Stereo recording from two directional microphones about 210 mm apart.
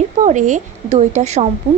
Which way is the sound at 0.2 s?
35° right (ahead or behind).